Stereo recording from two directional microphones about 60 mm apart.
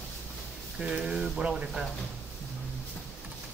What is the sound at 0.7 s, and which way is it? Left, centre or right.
Speech, centre.